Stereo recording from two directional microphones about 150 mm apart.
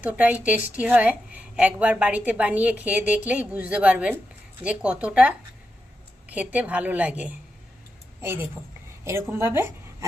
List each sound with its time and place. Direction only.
0.0 s a woman's voice: 10° right (ahead or behind)